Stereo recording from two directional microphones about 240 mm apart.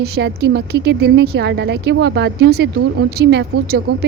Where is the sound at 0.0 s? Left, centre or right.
Right.